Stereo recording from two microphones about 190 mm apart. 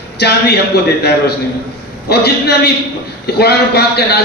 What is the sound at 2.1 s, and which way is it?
A man's voice, 60° left (ahead or behind).